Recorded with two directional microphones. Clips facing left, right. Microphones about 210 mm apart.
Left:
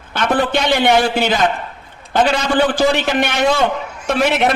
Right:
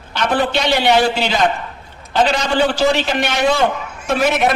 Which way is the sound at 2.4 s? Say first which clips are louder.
Left 1 dB; 55° left (ahead or behind).